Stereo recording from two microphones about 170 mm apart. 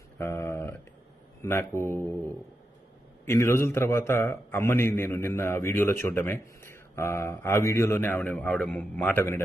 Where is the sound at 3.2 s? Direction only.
15° left (ahead or behind).